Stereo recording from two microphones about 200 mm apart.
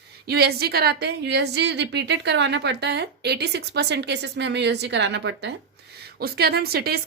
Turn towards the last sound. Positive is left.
turn(degrees=-50)  # may be behind; listen again after turning